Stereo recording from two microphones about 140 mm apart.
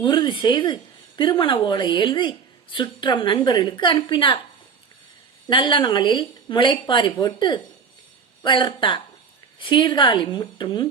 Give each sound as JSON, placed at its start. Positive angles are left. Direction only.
{"t": 0.0, "sound": "a woman's voice", "side_deg": 30}
{"t": 5.5, "sound": "a woman's voice", "side_deg": 35}